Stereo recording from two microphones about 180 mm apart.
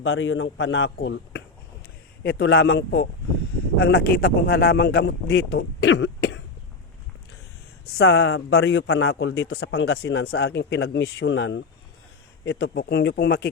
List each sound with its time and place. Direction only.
0.0 s a man's voice: 90° left; by 6.3 s 70° left (ahead or behind)
7.9 s a man's voice: 65° left (ahead or behind); by 11.6 s 90° left
12.5 s a man's voice: 60° left (ahead or behind)